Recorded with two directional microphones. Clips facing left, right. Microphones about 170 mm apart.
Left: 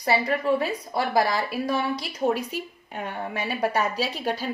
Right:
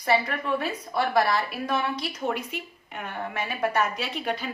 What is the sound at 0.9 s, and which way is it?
A woman's voice, 35° left (ahead or behind).